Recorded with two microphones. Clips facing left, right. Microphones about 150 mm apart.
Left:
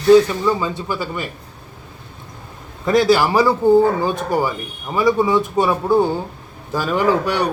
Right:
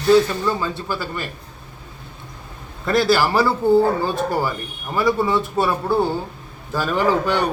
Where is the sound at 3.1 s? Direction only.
15° left (ahead or behind).